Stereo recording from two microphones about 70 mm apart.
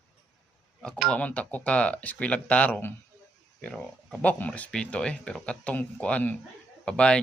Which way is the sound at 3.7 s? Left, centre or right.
Centre.